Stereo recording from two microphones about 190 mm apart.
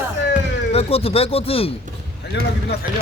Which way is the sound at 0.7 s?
30° left (ahead or behind).